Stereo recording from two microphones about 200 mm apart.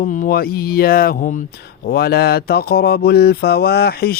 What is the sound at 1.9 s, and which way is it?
Speech, 50° left (ahead or behind).